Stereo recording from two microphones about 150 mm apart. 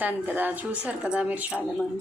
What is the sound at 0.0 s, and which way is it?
Speech, 10° right (ahead or behind).